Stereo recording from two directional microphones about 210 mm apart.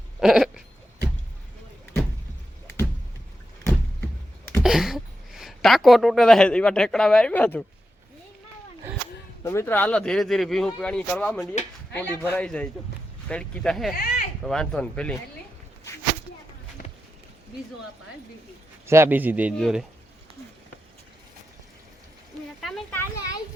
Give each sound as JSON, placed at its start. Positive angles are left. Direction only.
{"t": 0.2, "sound": "owl", "side_deg": -5}
{"t": 4.6, "sound": "a woman's voice", "side_deg": 0}
{"t": 9.4, "sound": "a man's voice", "side_deg": 15}
{"t": 13.9, "sound": "a sound", "side_deg": 45}
{"t": 14.4, "sound": "speech", "side_deg": 5}
{"t": 18.9, "sound": "speech", "side_deg": -10}
{"t": 22.6, "sound": "speech", "side_deg": 5}